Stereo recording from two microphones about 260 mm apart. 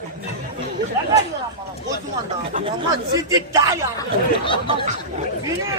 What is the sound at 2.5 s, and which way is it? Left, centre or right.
Speech, centre.